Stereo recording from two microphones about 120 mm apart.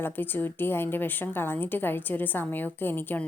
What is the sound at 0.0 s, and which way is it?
A woman's voice, 15° left (ahead or behind).